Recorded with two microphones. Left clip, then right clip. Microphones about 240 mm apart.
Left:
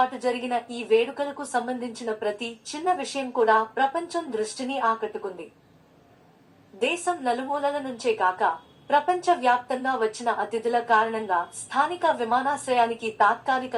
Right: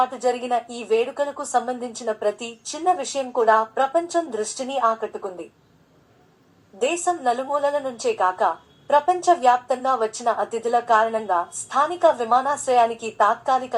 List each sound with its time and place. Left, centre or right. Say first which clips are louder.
0.0 s a woman's voice: right 3 dB; right
6.7 s a woman's voice: right 3 dB; right